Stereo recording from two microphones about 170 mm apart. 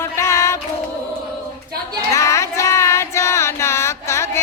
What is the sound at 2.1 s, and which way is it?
Music, 20° left (ahead or behind).